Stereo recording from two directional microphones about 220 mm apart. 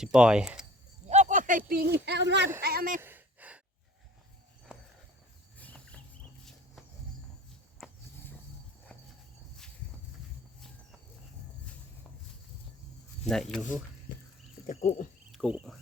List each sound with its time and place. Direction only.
0.0 s speech: 5° right (ahead or behind)
1.1 s a sound: 35° right (ahead or behind)
2.0 s speech: 50° right (ahead or behind)
3.0 s sigh: 10° right (ahead or behind)
4.7 s a sound: 5° right (ahead or behind)
5.5 s cricket: 5° left (ahead or behind)
13.2 s speech: centre (ahead or behind)
14.7 s a sound: 35° left (ahead or behind)
15.3 s speech: centre (ahead or behind)